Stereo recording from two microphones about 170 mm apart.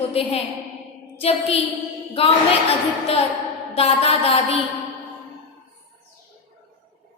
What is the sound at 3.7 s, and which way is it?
Speech, 35° left (ahead or behind).